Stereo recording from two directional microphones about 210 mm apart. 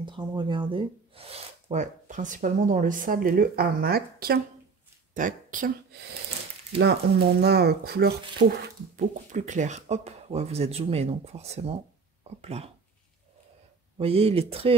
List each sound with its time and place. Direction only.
0.0 s speech: 20° right (ahead or behind); by 5.7 s 40° right (ahead or behind)
6.8 s speech: 50° right (ahead or behind); by 12.7 s 30° right (ahead or behind)
13.9 s speech: 30° right (ahead or behind)